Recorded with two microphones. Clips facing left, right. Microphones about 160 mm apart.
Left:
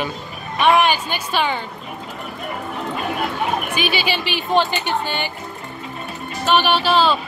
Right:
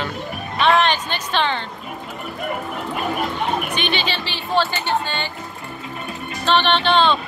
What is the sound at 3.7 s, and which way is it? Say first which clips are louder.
Speech: left 2 dB; 5° left (ahead or behind).